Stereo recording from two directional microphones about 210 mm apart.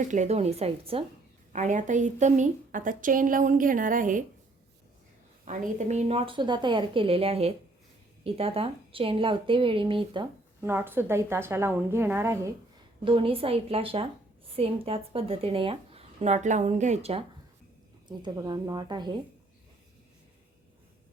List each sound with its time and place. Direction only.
0.0 s a woman's voice: 35° right (ahead or behind)
5.5 s speech: 35° right (ahead or behind)
10.6 s a woman's voice: 10° right (ahead or behind)
13.1 s speech: 25° right (ahead or behind)